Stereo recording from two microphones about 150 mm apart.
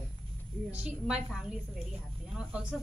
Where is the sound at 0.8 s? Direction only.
5° right (ahead or behind).